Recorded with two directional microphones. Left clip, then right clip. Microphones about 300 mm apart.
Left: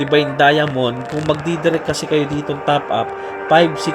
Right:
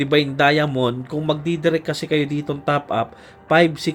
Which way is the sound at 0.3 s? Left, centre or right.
Centre.